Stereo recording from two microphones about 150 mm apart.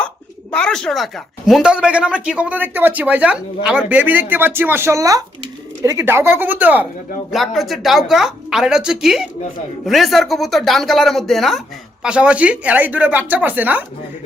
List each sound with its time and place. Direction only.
0.5 s a woman's voice: 5° left (ahead or behind); by 6.8 s 10° right (ahead or behind)
7.3 s a woman's voice: centre (ahead or behind)